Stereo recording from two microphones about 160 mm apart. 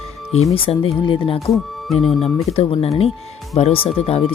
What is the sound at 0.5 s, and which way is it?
Speech, 35° left (ahead or behind).